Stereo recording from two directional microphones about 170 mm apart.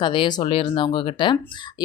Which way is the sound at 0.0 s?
30° left (ahead or behind).